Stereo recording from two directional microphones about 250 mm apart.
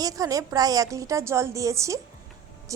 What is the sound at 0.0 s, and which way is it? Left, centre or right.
A woman's voice, centre.